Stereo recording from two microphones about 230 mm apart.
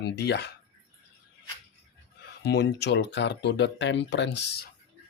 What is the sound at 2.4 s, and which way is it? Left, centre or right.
Speech, left.